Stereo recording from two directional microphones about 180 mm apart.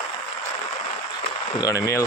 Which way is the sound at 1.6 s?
15° left (ahead or behind).